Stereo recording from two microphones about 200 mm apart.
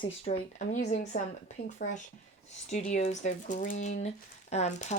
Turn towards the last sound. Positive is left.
turn(degrees=35)  # may be behind; listen again after turning